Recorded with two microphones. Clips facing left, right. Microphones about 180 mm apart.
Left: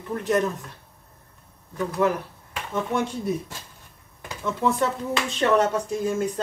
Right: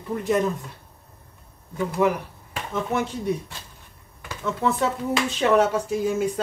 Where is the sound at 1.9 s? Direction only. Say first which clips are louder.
Right 1 dB; 10° right (ahead or behind).